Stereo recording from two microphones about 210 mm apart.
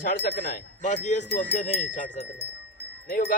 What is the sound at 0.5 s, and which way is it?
Speech, 35° left (ahead or behind).